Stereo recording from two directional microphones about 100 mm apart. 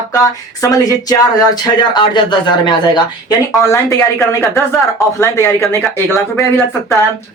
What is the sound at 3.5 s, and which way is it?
Speech, 30° left (ahead or behind).